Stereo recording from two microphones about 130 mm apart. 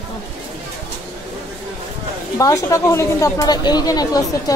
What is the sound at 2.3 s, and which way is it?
Speech, 25° left (ahead or behind).